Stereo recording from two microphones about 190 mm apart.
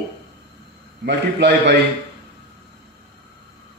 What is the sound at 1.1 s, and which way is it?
Speech, 65° right (ahead or behind).